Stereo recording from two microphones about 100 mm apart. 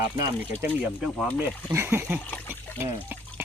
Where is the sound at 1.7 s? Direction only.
25° right (ahead or behind).